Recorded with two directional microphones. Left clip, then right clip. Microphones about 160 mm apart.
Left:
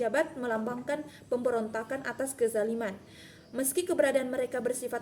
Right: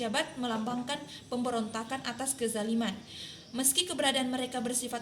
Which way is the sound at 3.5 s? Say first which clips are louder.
Left 3 dB; 20° left (ahead or behind).